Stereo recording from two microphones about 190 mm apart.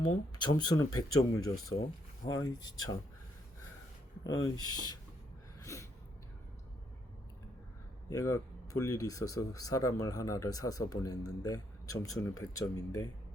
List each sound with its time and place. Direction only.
0.0 s speech: 20° left (ahead or behind)
4.4 s speech: 20° left (ahead or behind)
5.5 s a sound: 15° left (ahead or behind)
8.1 s speech: 15° left (ahead or behind)